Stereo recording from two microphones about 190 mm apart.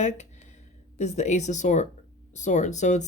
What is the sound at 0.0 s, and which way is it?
Speech, 40° left (ahead or behind).